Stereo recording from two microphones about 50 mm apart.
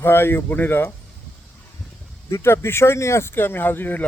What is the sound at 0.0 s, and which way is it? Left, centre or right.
Speech, left.